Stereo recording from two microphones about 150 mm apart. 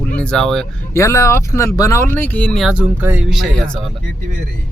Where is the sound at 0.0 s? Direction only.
10° left (ahead or behind).